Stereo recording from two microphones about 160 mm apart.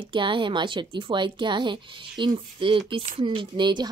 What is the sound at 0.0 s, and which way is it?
A woman's voice, 30° right (ahead or behind).